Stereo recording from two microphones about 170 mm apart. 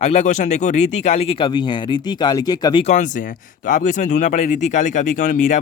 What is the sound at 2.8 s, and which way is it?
Speech, 45° left (ahead or behind).